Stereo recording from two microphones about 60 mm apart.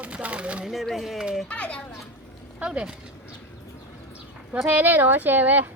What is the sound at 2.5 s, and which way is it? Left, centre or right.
Speech, centre.